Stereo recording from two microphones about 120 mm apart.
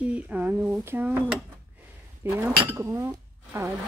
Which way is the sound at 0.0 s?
10° right (ahead or behind).